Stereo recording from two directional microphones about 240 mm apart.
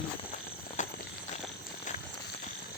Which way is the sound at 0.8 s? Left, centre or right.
Left.